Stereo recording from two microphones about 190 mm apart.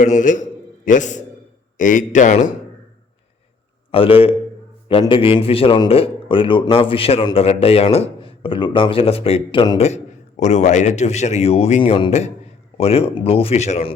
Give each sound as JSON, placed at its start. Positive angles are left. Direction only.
{"t": 0.0, "sound": "speech", "side_deg": 40}
{"t": 3.9, "sound": "a man's voice", "side_deg": 30}